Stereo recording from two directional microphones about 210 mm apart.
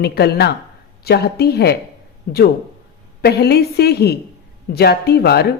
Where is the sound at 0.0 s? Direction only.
50° left (ahead or behind).